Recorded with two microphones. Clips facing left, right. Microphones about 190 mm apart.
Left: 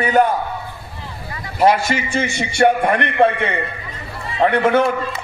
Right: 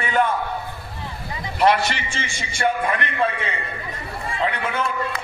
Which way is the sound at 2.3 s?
70° left (ahead or behind).